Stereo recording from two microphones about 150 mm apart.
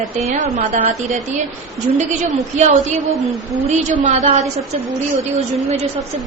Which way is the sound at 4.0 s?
60° right (ahead or behind).